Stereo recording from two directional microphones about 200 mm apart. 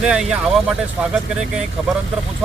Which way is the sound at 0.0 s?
5° right (ahead or behind).